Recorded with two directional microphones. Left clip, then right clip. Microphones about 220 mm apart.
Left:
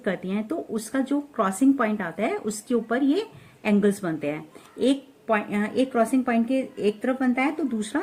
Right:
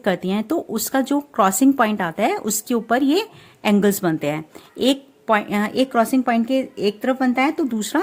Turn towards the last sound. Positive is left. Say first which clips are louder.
# right 6 dB
turn(degrees=-45)  # may be behind; listen again after turning